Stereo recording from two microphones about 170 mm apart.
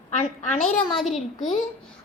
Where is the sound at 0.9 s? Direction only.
Centre (ahead or behind).